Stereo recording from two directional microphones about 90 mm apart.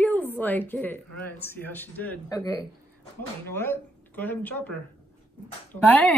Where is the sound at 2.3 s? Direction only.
40° left (ahead or behind).